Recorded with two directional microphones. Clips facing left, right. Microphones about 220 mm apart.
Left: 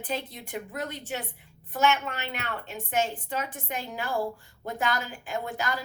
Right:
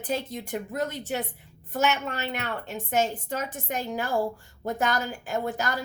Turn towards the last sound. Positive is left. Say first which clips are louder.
# right 3 dB
turn(degrees=-40)  # may be behind; listen again after turning